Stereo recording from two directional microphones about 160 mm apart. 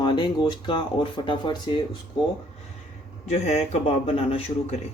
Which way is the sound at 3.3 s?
45° left (ahead or behind).